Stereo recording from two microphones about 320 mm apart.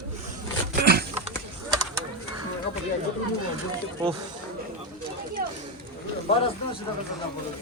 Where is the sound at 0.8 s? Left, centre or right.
Right.